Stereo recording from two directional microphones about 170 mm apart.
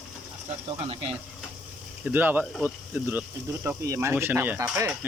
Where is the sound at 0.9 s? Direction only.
35° right (ahead or behind).